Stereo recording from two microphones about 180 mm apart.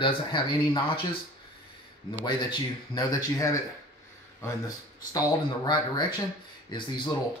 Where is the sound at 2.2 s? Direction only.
25° left (ahead or behind).